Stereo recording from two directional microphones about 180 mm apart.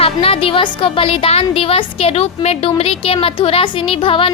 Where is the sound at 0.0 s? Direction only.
30° left (ahead or behind).